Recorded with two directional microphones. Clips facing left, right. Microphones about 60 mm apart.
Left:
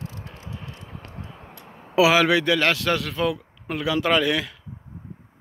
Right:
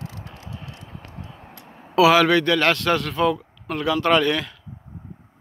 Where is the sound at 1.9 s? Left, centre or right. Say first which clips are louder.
Right 2 dB; centre.